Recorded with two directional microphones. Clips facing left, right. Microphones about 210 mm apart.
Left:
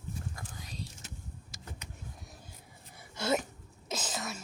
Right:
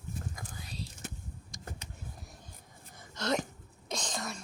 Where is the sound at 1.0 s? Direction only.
55° right (ahead or behind).